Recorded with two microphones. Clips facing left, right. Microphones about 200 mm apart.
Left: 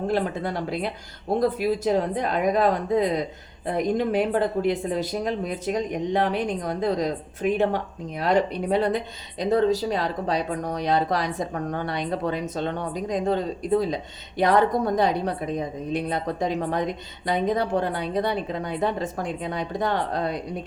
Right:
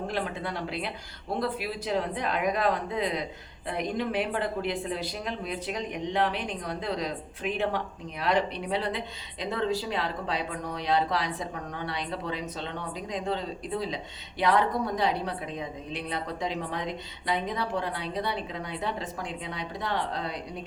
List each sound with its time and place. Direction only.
0.1 s speech: 45° left (ahead or behind)